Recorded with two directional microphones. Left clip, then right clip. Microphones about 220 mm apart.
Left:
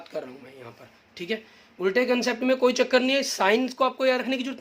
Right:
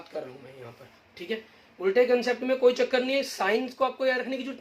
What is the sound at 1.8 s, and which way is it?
Speech, 45° left (ahead or behind).